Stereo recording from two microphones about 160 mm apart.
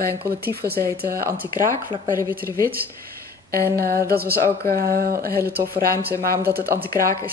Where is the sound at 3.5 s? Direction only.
65° right (ahead or behind).